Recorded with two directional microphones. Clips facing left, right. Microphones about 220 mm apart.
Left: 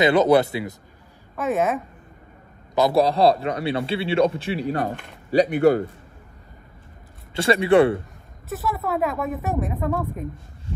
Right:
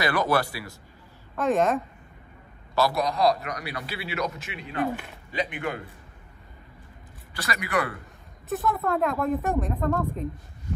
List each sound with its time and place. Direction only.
0.0 s a man's voice: 20° left (ahead or behind)
1.3 s a woman's voice: 5° left (ahead or behind)
2.9 s a man's voice: 30° left (ahead or behind)
7.3 s a man's voice: 30° left (ahead or behind)
8.5 s a woman's voice: centre (ahead or behind)